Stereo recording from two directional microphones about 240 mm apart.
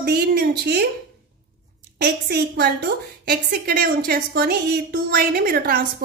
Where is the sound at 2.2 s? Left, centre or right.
Right.